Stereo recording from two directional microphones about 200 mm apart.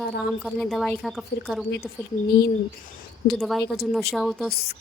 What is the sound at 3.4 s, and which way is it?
Speech, centre (ahead or behind).